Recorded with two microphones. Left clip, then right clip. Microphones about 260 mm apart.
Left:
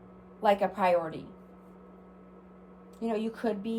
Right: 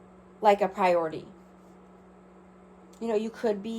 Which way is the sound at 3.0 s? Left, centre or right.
Right.